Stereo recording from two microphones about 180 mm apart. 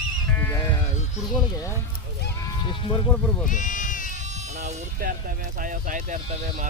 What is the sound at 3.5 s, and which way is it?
Sheep, 45° left (ahead or behind).